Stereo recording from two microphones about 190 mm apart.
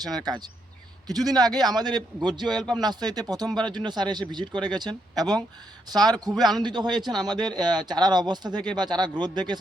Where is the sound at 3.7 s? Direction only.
25° right (ahead or behind).